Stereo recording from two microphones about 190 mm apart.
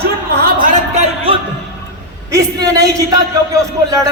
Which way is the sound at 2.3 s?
20° right (ahead or behind).